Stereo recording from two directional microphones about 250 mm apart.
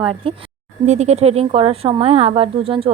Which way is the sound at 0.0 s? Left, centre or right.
Right.